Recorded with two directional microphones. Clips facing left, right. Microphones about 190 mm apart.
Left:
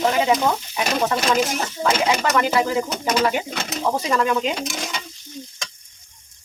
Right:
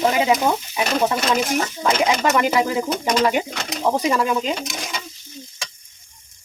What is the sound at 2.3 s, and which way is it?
Speech, 15° right (ahead or behind).